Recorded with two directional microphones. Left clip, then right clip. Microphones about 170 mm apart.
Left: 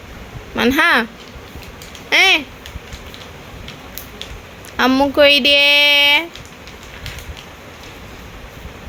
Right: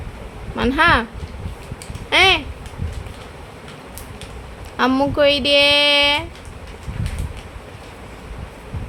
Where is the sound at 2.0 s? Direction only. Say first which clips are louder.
Left 2 dB; 15° left (ahead or behind).